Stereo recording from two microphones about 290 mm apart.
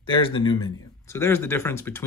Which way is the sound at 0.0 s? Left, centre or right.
Centre.